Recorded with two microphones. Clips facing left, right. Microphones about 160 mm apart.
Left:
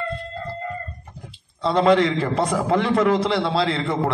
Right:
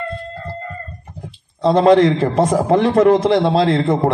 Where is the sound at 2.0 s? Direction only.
45° right (ahead or behind).